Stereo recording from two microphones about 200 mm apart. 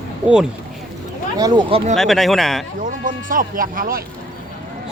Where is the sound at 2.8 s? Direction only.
40° right (ahead or behind).